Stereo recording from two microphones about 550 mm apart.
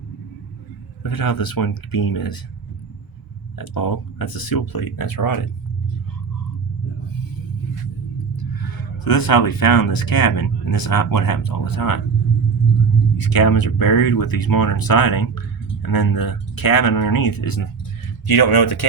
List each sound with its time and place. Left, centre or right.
1.0 s speech: left
3.6 s speech: left
9.0 s speech: left
13.1 s speech: left